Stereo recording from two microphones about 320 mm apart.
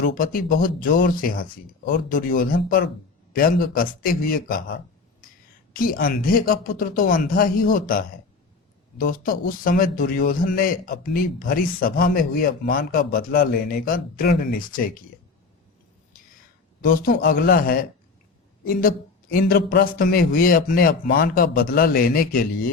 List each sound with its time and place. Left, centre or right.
0.0 s speech: left
16.8 s speech: left